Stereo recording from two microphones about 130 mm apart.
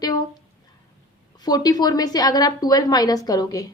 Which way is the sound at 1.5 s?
30° left (ahead or behind).